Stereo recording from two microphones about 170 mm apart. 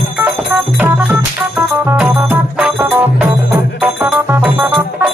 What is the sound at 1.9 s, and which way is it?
Music, 10° right (ahead or behind).